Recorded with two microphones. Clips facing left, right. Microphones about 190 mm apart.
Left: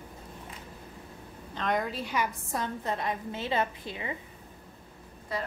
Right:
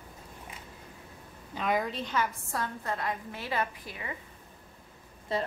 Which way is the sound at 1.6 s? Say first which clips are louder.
Even; 5° right (ahead or behind).